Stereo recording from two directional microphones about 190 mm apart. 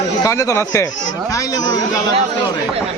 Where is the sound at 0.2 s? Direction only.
15° left (ahead or behind).